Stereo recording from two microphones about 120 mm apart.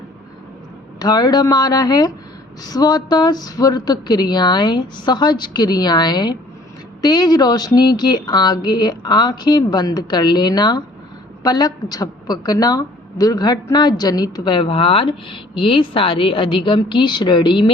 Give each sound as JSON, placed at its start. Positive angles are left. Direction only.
{"t": 0.9, "sound": "a woman's voice", "side_deg": 35}